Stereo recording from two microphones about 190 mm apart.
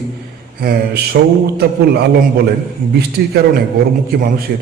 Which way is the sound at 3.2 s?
60° right (ahead or behind).